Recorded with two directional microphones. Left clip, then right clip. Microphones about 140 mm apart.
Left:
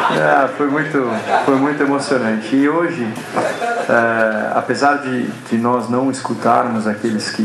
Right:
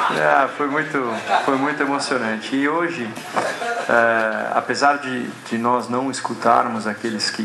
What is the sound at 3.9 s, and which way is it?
Speech, 30° right (ahead or behind).